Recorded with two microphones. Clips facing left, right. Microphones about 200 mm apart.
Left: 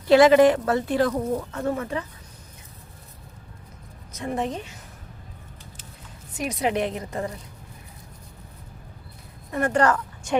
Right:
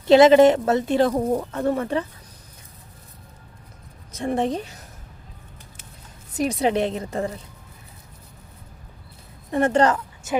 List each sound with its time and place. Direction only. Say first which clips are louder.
0.1 s speech: right 2 dB; 25° right (ahead or behind)
4.2 s a woman's voice: right 4 dB; 30° right (ahead or behind)
6.3 s speech: right 4 dB; 35° right (ahead or behind)
9.5 s speech: right 3 dB; 25° right (ahead or behind)
10.3 s a woman's voice: left 1 dB; 5° right (ahead or behind)